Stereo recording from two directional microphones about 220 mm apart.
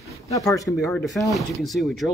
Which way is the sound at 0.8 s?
Centre (ahead or behind).